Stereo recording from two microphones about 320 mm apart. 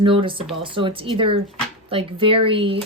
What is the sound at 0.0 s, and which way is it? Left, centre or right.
Speech, centre.